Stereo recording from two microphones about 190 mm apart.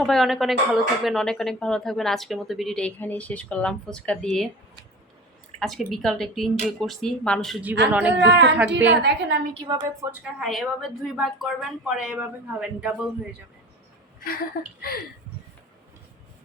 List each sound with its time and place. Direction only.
0.0 s speech: centre (ahead or behind)
5.5 s speech: centre (ahead or behind)
8.1 s a woman's voice: 65° right (ahead or behind)
9.6 s a woman's voice: 25° right (ahead or behind)
10.0 s a woman's voice: 15° right (ahead or behind)
10.4 s speech: centre (ahead or behind)
14.2 s speech: 50° left (ahead or behind)